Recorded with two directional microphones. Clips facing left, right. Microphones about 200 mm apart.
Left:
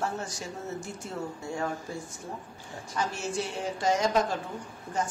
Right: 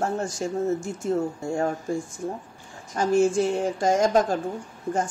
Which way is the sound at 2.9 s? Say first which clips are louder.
Right 12 dB; 50° right (ahead or behind).